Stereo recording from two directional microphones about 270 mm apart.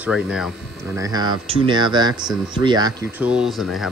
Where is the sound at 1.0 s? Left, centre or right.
Centre.